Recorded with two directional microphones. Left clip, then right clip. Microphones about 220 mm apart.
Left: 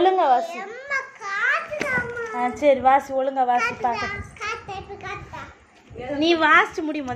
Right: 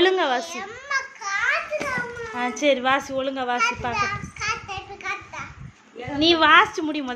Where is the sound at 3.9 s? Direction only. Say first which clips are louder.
Right 2 dB; 35° right (ahead or behind).